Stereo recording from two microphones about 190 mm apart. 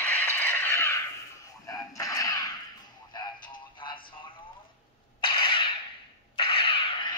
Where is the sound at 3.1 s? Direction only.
25° left (ahead or behind).